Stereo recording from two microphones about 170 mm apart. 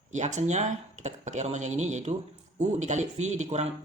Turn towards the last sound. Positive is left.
turn(degrees=-40)  # may be behind; listen again after turning